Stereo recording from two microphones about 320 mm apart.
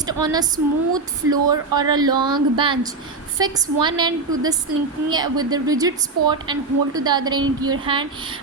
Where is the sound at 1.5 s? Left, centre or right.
Centre.